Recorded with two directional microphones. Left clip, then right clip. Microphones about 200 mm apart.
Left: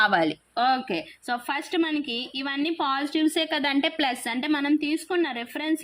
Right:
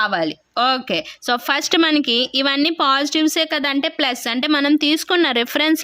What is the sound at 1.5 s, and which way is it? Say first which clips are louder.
Speech: right 11 dB; 50° right (ahead or behind).